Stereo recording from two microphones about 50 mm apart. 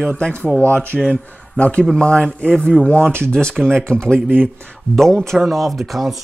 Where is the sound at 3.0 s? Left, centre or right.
Right.